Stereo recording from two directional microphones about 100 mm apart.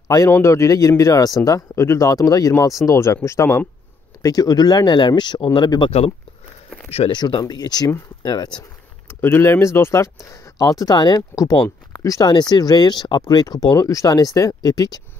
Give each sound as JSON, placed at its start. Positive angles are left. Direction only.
{"t": 0.3, "sound": "speech", "side_deg": 25}
{"t": 4.2, "sound": "speech", "side_deg": 35}
{"t": 5.9, "sound": "speech", "side_deg": 85}
{"t": 7.1, "sound": "speech", "side_deg": 50}
{"t": 9.2, "sound": "speech", "side_deg": 25}
{"t": 11.0, "sound": "speech", "side_deg": 45}
{"t": 12.3, "sound": "speech", "side_deg": 45}